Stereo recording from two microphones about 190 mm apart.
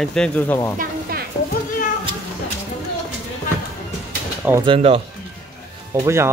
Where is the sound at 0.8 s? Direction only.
50° right (ahead or behind).